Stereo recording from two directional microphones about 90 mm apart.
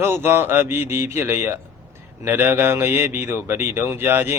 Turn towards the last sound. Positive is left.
turn(degrees=-25)  # may be behind; listen again after turning